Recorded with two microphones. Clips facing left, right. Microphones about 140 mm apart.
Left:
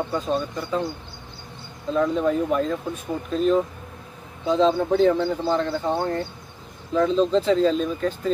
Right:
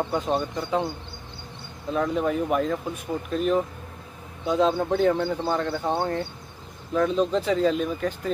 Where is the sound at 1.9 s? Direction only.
10° right (ahead or behind).